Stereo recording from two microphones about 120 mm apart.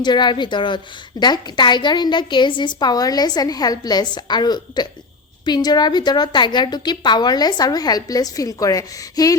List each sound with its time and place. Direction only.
0.0 s a woman's voice: 40° left (ahead or behind)